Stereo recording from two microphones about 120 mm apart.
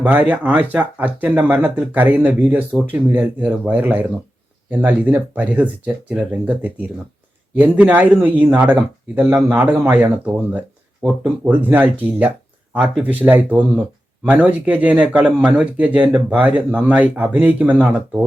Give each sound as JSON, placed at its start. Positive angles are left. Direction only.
{"t": 0.0, "sound": "a man's voice", "side_deg": -10}
{"t": 11.0, "sound": "speech", "side_deg": -5}
{"t": 11.4, "sound": "a man's voice", "side_deg": -15}